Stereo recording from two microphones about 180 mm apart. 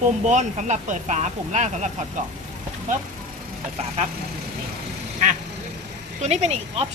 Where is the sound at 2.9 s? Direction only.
45° right (ahead or behind).